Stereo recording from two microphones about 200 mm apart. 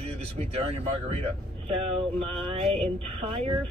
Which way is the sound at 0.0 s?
30° right (ahead or behind).